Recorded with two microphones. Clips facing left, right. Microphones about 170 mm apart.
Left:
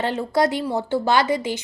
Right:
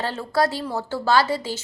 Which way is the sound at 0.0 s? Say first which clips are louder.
Left 2 dB; 20° left (ahead or behind).